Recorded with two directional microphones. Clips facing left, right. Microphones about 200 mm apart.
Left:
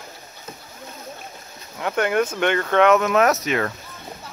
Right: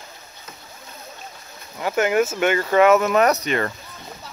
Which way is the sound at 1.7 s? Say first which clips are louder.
Right 2 dB; 5° right (ahead or behind).